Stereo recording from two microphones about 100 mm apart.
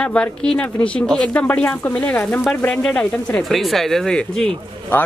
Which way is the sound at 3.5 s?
Centre (ahead or behind).